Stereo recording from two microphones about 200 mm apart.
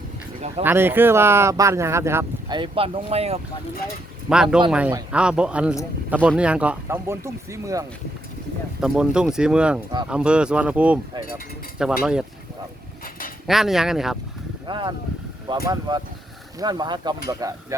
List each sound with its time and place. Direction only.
0.6 s speech: 10° right (ahead or behind)
2.6 s speech: 25° right (ahead or behind)
4.7 s speech: 5° right (ahead or behind)
8.8 s speech: 5° right (ahead or behind)
13.5 s speech: centre (ahead or behind)
14.7 s speech: 25° right (ahead or behind)